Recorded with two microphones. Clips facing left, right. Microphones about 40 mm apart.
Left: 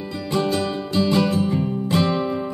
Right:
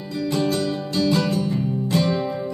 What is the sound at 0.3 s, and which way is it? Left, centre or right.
Music, left.